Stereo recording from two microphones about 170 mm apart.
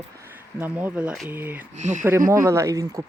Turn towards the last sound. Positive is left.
turn(degrees=-20)  # may be behind; listen again after turning